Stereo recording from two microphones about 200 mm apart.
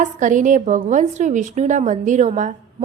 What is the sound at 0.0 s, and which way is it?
A woman's voice, 40° right (ahead or behind).